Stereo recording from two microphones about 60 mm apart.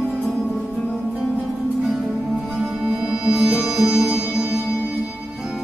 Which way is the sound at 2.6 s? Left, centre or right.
Centre.